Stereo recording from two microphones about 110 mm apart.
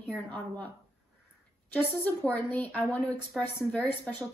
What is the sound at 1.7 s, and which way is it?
A woman's voice, 15° left (ahead or behind).